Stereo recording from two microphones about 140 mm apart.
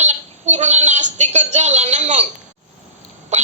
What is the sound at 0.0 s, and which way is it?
A woman's voice, 55° right (ahead or behind).